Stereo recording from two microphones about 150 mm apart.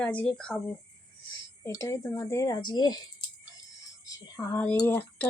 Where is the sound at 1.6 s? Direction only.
20° left (ahead or behind).